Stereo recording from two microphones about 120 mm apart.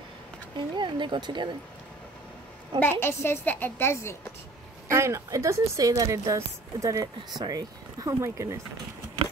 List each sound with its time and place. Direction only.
0.6 s speech: 40° right (ahead or behind)
2.8 s a woman's voice: 20° left (ahead or behind)
4.8 s a woman's voice: 25° right (ahead or behind)